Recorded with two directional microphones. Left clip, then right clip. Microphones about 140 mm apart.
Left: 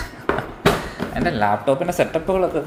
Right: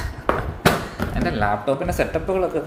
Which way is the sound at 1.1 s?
15° left (ahead or behind).